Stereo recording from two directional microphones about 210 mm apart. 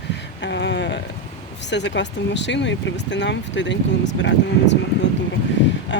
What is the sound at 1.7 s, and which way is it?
Speech, 55° left (ahead or behind).